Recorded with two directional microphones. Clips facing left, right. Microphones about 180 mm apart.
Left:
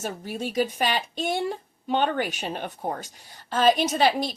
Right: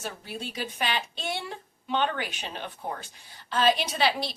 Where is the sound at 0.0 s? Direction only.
45° left (ahead or behind).